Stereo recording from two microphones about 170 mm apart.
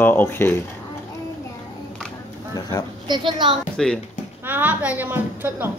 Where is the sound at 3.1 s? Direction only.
25° right (ahead or behind).